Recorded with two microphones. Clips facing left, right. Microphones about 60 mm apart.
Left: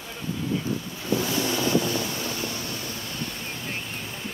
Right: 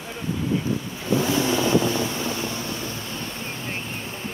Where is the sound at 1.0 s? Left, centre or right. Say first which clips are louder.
Right 4 dB; right.